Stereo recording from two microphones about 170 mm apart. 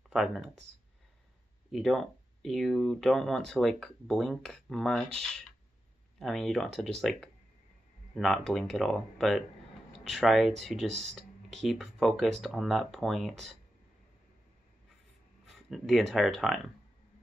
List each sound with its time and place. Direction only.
0.1 s speech: centre (ahead or behind)
1.7 s speech: centre (ahead or behind)
15.5 s speech: centre (ahead or behind)